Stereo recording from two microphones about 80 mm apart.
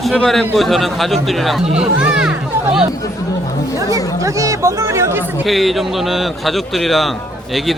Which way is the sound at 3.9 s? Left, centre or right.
Right.